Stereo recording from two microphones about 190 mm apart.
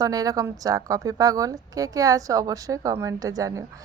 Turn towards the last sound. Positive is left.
turn(degrees=-15)  # may be behind; listen again after turning